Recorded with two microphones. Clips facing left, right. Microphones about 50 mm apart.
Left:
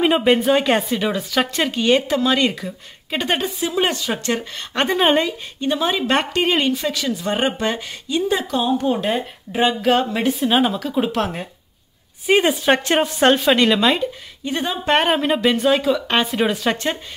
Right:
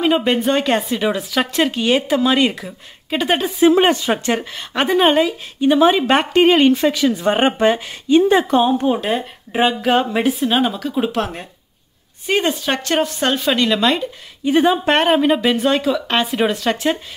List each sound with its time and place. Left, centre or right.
0.0 s speech: centre
3.5 s speech: right
3.8 s speech: right; by 5.3 s centre
5.6 s speech: centre
8.1 s speech: right
9.5 s speech: centre
12.3 s speech: centre
14.4 s speech: centre
14.9 s speech: centre